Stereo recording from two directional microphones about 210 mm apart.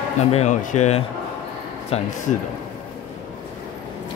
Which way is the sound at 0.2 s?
30° left (ahead or behind).